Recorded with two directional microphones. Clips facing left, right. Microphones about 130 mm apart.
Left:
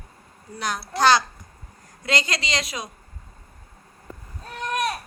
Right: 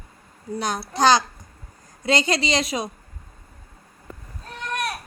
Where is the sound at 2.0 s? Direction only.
25° right (ahead or behind).